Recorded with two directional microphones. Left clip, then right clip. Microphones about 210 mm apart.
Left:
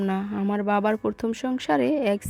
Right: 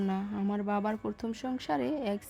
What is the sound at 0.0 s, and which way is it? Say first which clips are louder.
A woman's voice: left 7 dB; 30° left (ahead or behind).